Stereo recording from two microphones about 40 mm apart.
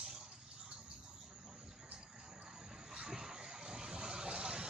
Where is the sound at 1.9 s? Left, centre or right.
Right.